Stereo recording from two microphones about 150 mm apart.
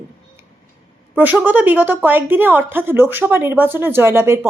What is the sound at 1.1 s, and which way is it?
A woman's voice, 10° right (ahead or behind).